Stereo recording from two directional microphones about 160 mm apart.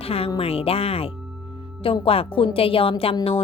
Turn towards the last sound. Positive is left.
turn(degrees=35)  # may be behind; listen again after turning